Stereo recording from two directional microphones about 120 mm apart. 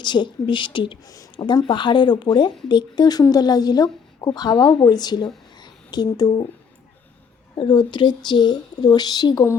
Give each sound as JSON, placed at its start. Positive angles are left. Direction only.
{"t": 0.0, "sound": "speech", "side_deg": 40}
{"t": 1.0, "sound": "speech", "side_deg": 30}
{"t": 1.6, "sound": "speech", "side_deg": 40}
{"t": 7.5, "sound": "speech", "side_deg": 40}